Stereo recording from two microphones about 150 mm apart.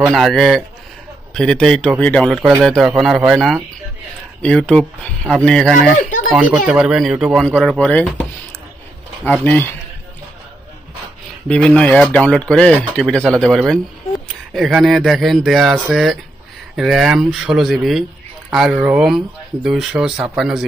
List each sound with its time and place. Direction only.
0.0 s speech: centre (ahead or behind)
6.0 s speech: 60° left (ahead or behind)
6.3 s speech: 5° right (ahead or behind)
11.4 s speech: 5° left (ahead or behind)